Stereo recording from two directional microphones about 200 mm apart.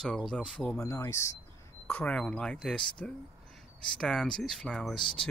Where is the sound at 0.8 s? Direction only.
15° left (ahead or behind).